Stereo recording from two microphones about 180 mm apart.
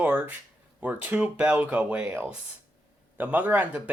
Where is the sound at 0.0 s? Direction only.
10° right (ahead or behind).